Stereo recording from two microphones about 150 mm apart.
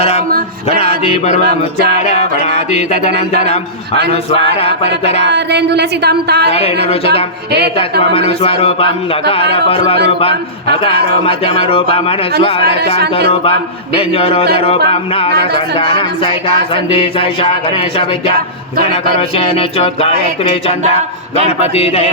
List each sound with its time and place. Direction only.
0.7 s music: 45° left (ahead or behind)
4.1 s music: 40° left (ahead or behind)
5.5 s a woman's voice: 90° right
6.5 s music: 40° left (ahead or behind)
8.3 s music: 40° left (ahead or behind)
14.1 s music: 40° left (ahead or behind)